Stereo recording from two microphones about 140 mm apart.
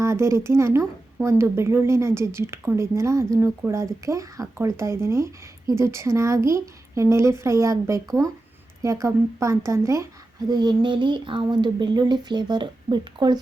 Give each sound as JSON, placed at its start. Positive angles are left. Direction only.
{"t": 0.0, "sound": "a woman's voice", "side_deg": -20}